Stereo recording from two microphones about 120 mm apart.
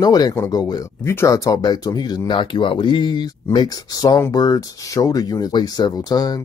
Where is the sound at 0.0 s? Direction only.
35° left (ahead or behind).